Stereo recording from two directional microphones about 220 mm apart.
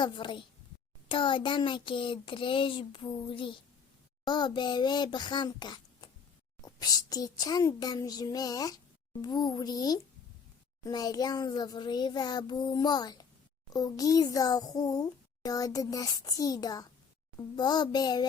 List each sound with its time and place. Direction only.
0.0 s a child's voice: 20° left (ahead or behind)